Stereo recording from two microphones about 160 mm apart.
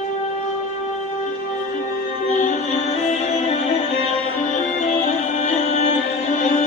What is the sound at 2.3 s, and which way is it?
Music, 50° left (ahead or behind).